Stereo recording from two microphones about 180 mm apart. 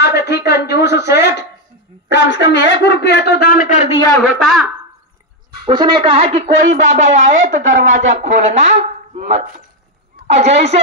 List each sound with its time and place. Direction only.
0.0 s a sound: 65° left (ahead or behind)
2.0 s a man's voice: 80° left; by 4.0 s 40° left (ahead or behind)
4.4 s speech: centre (ahead or behind)
5.7 s speech: 25° right (ahead or behind)